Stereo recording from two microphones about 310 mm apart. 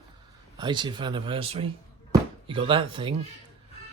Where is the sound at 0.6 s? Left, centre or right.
Centre.